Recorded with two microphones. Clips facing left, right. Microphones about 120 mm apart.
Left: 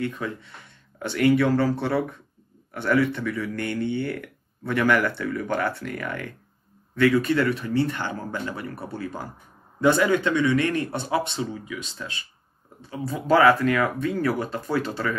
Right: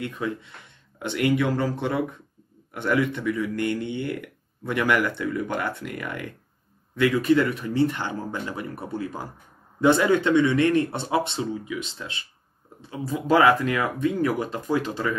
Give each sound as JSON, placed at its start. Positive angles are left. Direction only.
{"t": 0.0, "sound": "speech", "side_deg": -20}